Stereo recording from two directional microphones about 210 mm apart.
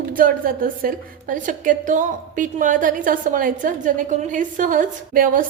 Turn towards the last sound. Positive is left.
turn(degrees=-40)  # may be behind; listen again after turning